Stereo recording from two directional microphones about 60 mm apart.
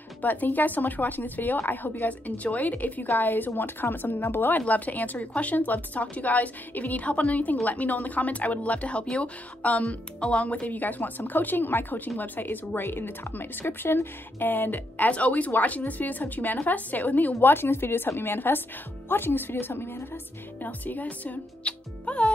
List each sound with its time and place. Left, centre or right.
0.2 s speech: left